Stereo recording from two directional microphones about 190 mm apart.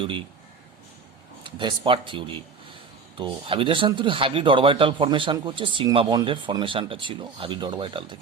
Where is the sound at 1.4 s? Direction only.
25° right (ahead or behind).